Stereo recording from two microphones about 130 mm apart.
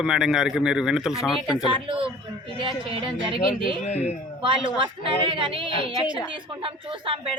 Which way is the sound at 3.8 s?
60° left (ahead or behind).